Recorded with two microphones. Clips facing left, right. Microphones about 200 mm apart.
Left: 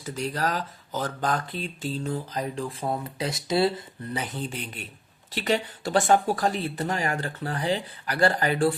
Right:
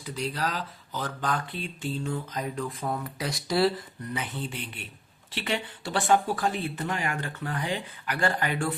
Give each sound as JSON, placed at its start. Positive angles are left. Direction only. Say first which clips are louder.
{"t": 0.0, "sound": "speech", "louder": "left 3 dB", "side_deg": 45}
{"t": 4.1, "sound": "speech", "louder": "left 2 dB", "side_deg": 40}